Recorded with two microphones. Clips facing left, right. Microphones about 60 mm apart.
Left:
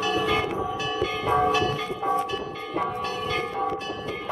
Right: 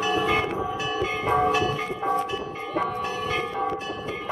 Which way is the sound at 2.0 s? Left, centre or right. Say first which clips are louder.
Even; centre.